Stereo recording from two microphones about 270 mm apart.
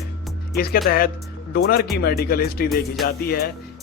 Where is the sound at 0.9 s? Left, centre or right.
Left.